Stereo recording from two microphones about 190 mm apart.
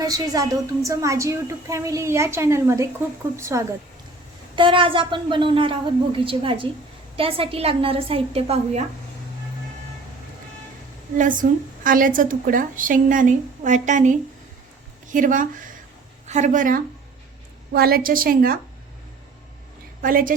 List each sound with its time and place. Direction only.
0.0 s a woman's voice: 20° right (ahead or behind)
4.5 s a woman's voice: 25° right (ahead or behind)
11.2 s a woman's voice: 45° right (ahead or behind)
20.0 s a woman's voice: 45° right (ahead or behind)